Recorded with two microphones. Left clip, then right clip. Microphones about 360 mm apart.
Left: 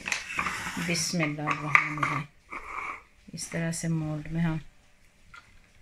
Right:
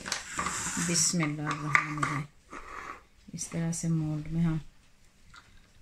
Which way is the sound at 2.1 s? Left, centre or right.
Centre.